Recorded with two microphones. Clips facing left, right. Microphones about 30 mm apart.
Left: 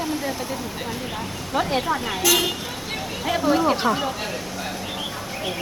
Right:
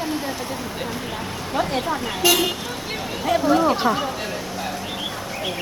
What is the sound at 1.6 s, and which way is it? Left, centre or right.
Speech, centre.